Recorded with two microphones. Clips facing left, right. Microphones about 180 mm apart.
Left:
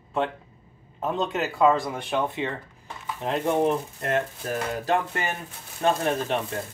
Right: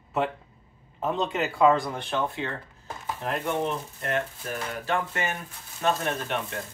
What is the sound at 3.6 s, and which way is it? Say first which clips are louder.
Speech: left 6 dB; 40° left (ahead or behind).